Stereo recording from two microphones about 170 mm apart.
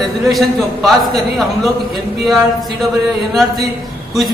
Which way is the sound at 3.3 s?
Centre (ahead or behind).